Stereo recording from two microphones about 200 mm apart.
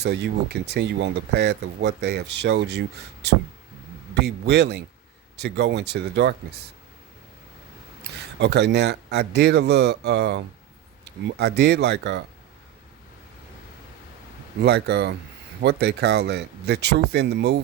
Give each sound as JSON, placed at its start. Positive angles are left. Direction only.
{"t": 0.0, "sound": "speech", "side_deg": -55}
{"t": 8.4, "sound": "speech", "side_deg": -55}
{"t": 14.6, "sound": "speech", "side_deg": -55}